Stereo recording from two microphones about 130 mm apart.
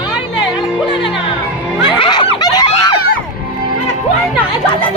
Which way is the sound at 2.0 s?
35° left (ahead or behind).